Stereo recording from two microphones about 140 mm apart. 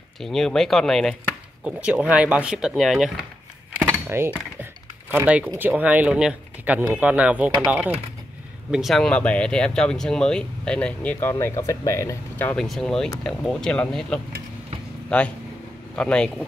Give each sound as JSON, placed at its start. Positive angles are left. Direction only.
{"t": 0.2, "sound": "speech", "side_deg": 5}
{"t": 1.6, "sound": "speech", "side_deg": -10}
{"t": 4.1, "sound": "speech", "side_deg": -15}
{"t": 8.7, "sound": "speech", "side_deg": 0}
{"t": 12.5, "sound": "speech", "side_deg": 0}